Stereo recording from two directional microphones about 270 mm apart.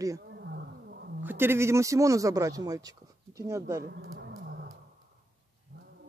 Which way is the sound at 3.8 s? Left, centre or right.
Right.